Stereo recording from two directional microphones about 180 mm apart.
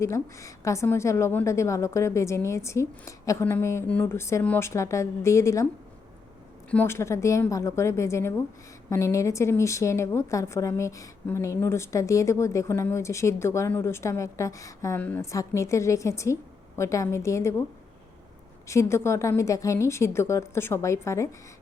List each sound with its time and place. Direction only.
0.0 s a woman's voice: 15° left (ahead or behind)
6.7 s a woman's voice: 10° left (ahead or behind)
18.7 s a woman's voice: 15° left (ahead or behind)